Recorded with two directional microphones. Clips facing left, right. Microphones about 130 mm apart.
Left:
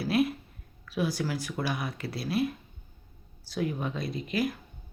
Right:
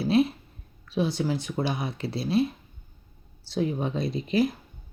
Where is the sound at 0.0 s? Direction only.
25° right (ahead or behind).